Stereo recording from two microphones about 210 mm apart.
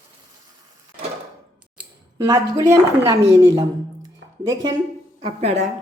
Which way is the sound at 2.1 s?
15° right (ahead or behind).